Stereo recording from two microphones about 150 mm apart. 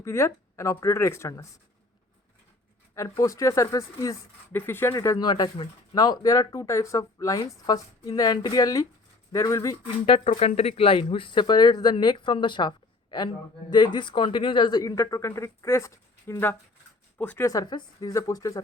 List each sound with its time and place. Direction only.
0.0 s speech: 20° left (ahead or behind)
2.9 s speech: 20° left (ahead or behind)
10.1 s speech: 40° left (ahead or behind); by 18.6 s 20° left (ahead or behind)